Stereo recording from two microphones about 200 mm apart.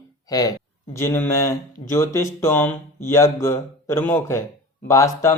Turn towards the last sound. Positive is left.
turn(degrees=15)  # may be behind; listen again after turning